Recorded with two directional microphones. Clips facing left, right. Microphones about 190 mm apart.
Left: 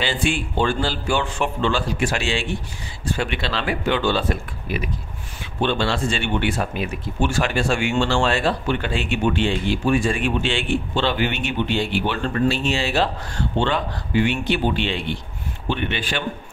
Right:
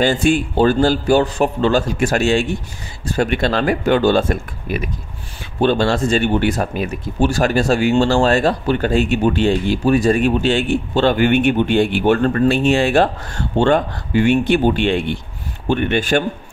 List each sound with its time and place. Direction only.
0.0 s speech: 45° right (ahead or behind)